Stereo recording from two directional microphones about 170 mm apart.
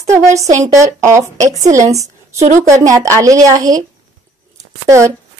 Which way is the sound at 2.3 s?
40° right (ahead or behind).